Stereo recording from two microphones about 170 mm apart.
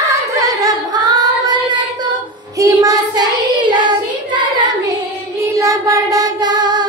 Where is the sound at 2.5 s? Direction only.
20° right (ahead or behind).